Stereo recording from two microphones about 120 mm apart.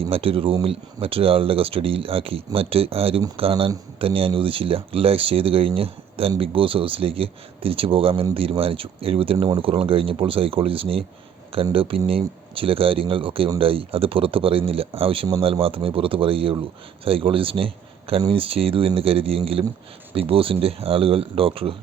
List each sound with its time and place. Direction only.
0.1 s speech: 50° right (ahead or behind)